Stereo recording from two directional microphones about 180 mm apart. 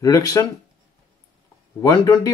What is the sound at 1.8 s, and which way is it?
Speech, 20° left (ahead or behind).